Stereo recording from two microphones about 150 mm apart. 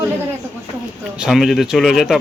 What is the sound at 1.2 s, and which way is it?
Speech, centre (ahead or behind).